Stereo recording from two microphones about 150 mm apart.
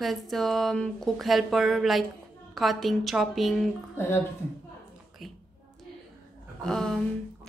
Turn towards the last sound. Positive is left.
turn(degrees=5)  # may be behind; listen again after turning